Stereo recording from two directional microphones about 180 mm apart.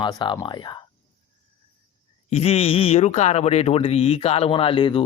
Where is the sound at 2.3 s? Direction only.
35° left (ahead or behind).